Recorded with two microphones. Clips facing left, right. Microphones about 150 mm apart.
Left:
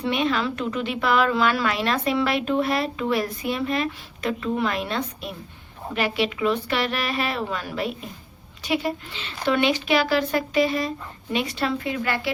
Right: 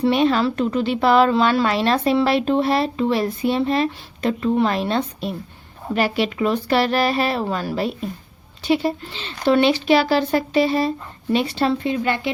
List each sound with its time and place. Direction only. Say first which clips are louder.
0.0 s a woman's voice: right 6 dB; 35° right (ahead or behind)